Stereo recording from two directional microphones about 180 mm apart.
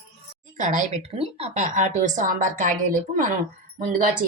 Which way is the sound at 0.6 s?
45° right (ahead or behind).